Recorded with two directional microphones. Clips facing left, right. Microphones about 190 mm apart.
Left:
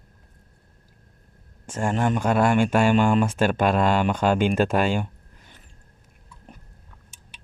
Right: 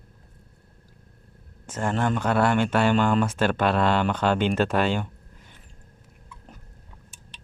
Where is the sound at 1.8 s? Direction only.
15° left (ahead or behind).